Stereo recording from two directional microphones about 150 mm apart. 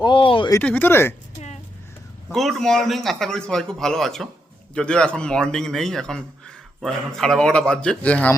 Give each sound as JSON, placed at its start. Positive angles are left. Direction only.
{"t": 0.0, "sound": "speech", "side_deg": 35}
{"t": 0.6, "sound": "speech", "side_deg": 10}
{"t": 2.3, "sound": "a man's voice", "side_deg": 0}